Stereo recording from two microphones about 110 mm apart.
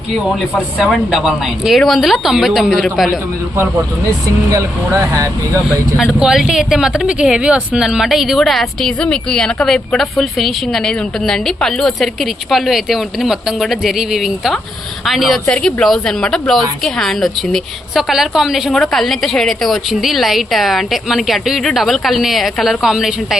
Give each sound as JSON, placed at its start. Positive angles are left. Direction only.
{"t": 0.1, "sound": "speech", "side_deg": -5}
{"t": 4.5, "sound": "speech", "side_deg": -25}
{"t": 6.1, "sound": "speech", "side_deg": -5}